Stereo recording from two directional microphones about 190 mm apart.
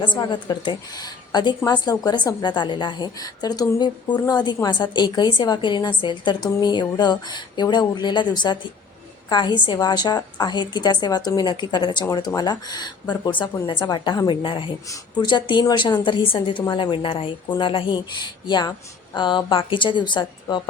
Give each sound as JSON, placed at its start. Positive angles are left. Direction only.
{"t": 0.0, "sound": "a woman's voice", "side_deg": 25}